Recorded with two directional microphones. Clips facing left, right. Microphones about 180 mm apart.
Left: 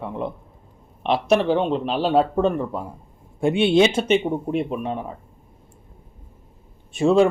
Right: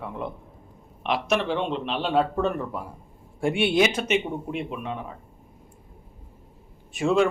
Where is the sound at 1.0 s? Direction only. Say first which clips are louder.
Left 6 dB; 35° left (ahead or behind).